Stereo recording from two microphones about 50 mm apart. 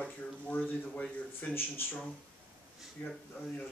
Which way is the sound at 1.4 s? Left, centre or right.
Left.